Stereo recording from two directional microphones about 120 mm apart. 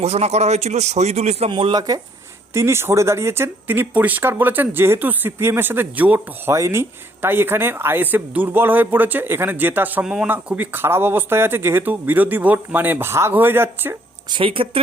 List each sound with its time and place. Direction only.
0.0 s a man's voice: 65° right (ahead or behind)
1.5 s speech: 45° right (ahead or behind)
2.5 s speech: 20° right (ahead or behind)
14.3 s speech: 45° right (ahead or behind)